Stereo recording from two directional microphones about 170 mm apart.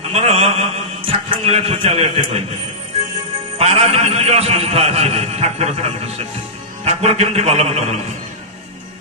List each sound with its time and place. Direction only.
0.1 s a man's voice: 40° right (ahead or behind)
3.5 s a man's voice: 35° right (ahead or behind)